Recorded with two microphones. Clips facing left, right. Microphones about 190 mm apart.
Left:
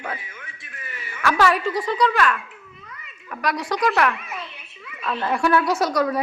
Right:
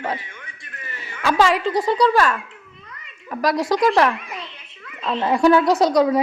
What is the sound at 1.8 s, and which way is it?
Speech, 35° right (ahead or behind).